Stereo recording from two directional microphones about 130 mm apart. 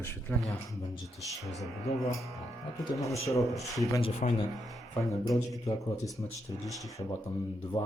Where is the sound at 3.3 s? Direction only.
25° left (ahead or behind).